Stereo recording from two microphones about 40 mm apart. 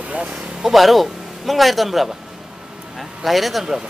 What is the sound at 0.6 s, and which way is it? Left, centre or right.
Speech, centre.